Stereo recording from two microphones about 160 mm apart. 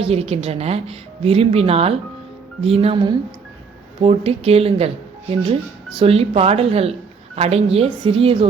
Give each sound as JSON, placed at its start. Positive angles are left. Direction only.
{"t": 0.0, "sound": "a woman's voice", "side_deg": -40}
{"t": 6.0, "sound": "a woman's voice", "side_deg": -35}